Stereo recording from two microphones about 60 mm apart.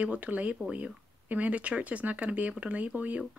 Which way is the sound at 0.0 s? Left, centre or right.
Right.